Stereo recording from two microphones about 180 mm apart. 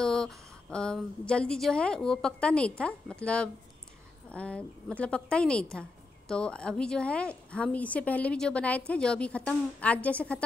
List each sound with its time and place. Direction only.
0.0 s a woman's voice: 5° left (ahead or behind)